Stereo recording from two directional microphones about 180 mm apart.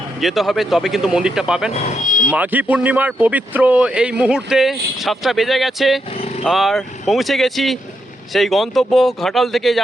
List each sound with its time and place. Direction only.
0.2 s speech: centre (ahead or behind)
1.7 s speech: 40° left (ahead or behind)
2.3 s speech: 10° right (ahead or behind)